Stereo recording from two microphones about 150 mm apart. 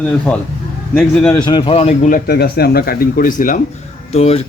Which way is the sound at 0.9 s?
10° left (ahead or behind).